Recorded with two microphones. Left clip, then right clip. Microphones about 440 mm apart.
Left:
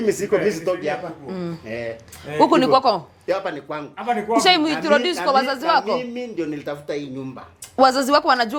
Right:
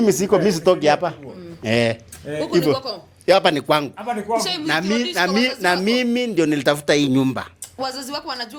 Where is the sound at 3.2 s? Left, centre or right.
Right.